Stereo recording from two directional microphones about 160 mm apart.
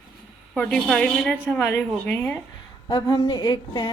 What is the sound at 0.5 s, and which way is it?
Speech, 5° left (ahead or behind).